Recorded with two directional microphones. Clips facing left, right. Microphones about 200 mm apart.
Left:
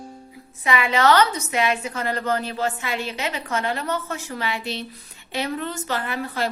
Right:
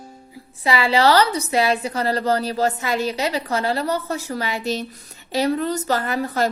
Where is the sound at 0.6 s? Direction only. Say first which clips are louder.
Right 3 dB; 35° right (ahead or behind).